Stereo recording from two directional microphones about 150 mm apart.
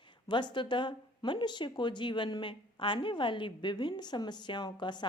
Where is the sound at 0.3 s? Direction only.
30° left (ahead or behind).